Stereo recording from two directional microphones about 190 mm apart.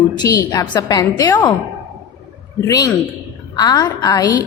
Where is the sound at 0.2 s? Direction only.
20° left (ahead or behind).